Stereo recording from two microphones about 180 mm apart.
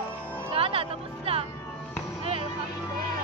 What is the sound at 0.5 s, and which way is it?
Music, 30° right (ahead or behind).